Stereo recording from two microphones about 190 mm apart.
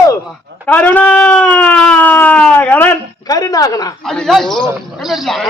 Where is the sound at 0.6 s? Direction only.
10° left (ahead or behind).